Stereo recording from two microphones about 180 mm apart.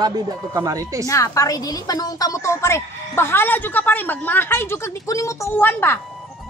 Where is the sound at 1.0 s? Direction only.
20° left (ahead or behind).